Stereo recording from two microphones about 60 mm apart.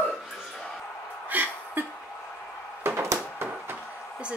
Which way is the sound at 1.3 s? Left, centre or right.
Right.